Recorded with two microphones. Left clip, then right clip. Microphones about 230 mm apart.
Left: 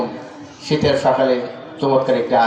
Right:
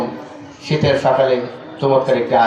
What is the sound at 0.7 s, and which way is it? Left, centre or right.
A man's voice, right.